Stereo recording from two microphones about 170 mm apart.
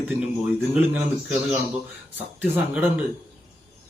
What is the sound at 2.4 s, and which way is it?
Speech, 5° right (ahead or behind).